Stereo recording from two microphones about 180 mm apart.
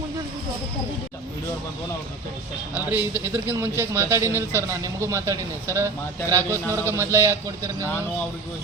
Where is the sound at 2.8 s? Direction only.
10° right (ahead or behind).